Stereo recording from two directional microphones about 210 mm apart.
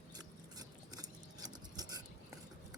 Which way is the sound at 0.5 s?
20° right (ahead or behind).